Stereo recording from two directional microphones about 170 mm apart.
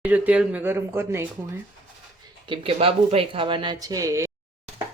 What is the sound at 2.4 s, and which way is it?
Speech, 30° right (ahead or behind).